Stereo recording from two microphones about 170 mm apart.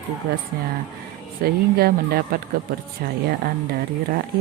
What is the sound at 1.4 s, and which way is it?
Speech, 65° right (ahead or behind).